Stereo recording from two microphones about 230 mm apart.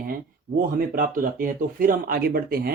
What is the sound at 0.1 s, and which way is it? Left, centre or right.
Speech, right.